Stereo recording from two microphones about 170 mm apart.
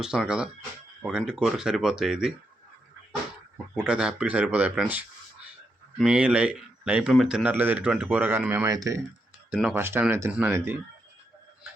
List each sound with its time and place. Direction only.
0.0 s speech: 5° right (ahead or behind)
3.8 s speech: 5° right (ahead or behind)
9.5 s speech: 5° right (ahead or behind)